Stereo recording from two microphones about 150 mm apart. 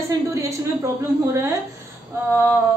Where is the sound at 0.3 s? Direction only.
20° right (ahead or behind).